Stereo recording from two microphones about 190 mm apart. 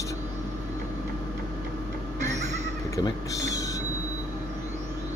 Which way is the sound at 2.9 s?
15° left (ahead or behind).